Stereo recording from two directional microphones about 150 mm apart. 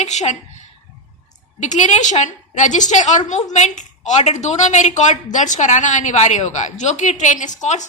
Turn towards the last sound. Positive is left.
turn(degrees=55)  # may be behind; listen again after turning